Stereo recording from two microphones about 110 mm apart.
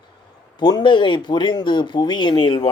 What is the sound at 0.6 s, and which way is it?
Speech, 40° left (ahead or behind).